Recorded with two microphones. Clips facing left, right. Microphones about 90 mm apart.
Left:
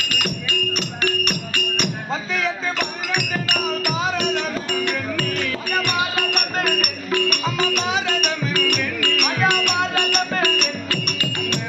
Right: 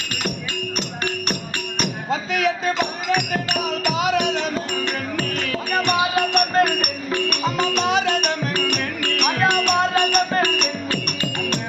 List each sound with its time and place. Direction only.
0.1 s music: 35° right (ahead or behind)
2.7 s music: 30° right (ahead or behind)
3.9 s music: 70° right (ahead or behind)
5.8 s music: 40° right (ahead or behind)
7.9 s music: 65° right (ahead or behind)
8.2 s music: 35° right (ahead or behind)